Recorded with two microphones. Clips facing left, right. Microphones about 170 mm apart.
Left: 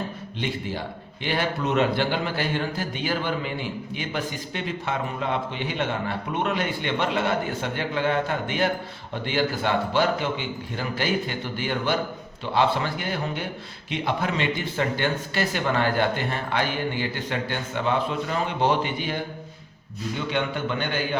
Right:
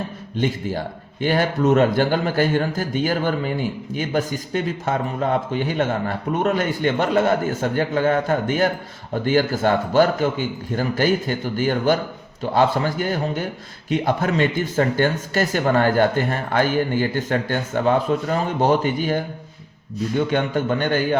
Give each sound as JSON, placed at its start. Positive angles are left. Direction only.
{"t": 0.3, "sound": "speech", "side_deg": -45}